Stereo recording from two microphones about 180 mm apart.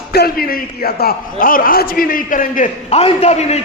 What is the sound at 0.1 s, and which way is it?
A man's voice, 60° left (ahead or behind).